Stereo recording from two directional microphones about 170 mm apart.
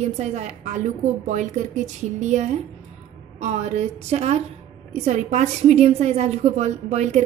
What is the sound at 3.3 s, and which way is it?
A woman's voice, 40° right (ahead or behind).